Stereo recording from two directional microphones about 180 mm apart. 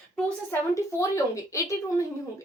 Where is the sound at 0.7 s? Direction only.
15° left (ahead or behind).